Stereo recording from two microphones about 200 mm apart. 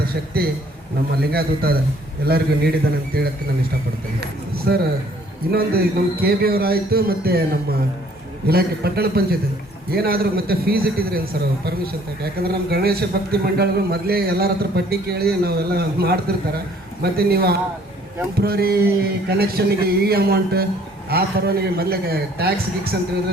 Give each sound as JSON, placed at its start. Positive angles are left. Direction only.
{"t": 0.0, "sound": "a man's voice", "side_deg": -50}
{"t": 4.5, "sound": "a man's voice", "side_deg": -50}